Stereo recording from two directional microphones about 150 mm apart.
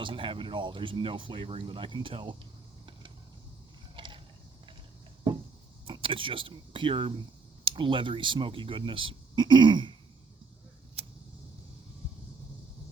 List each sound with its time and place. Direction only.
0.0 s speech: 35° right (ahead or behind)
3.9 s a sound: 30° right (ahead or behind)
5.8 s speech: 35° right (ahead or behind)